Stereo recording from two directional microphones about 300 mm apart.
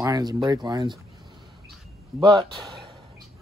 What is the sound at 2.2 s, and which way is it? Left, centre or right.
Speech, centre.